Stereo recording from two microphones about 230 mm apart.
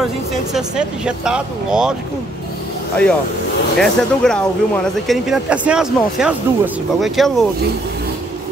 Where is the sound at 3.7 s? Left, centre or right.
Centre.